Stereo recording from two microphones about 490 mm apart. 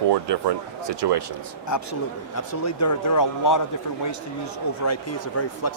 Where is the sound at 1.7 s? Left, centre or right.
Left.